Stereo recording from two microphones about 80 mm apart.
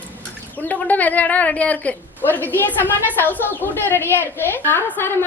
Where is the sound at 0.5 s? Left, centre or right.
Left.